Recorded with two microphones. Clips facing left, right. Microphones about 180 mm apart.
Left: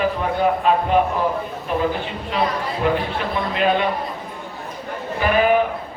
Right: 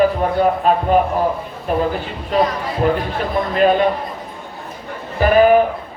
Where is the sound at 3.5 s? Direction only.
45° right (ahead or behind).